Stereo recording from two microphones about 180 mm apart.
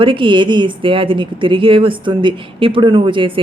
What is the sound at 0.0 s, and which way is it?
A woman's voice, 30° right (ahead or behind).